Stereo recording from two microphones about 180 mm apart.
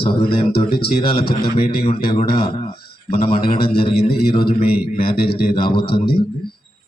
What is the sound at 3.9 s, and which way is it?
A man's voice, 60° left (ahead or behind).